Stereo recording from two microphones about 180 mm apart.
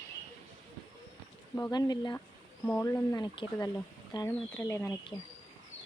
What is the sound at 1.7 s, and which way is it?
Speech, 25° left (ahead or behind).